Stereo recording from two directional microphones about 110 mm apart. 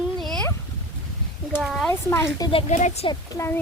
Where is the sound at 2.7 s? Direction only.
90° left.